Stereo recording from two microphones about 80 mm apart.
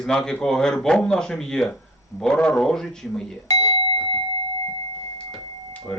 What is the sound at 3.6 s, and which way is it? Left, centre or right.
Doorbell, left.